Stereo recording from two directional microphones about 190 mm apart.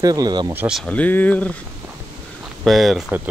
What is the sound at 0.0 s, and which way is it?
Speech, 20° right (ahead or behind).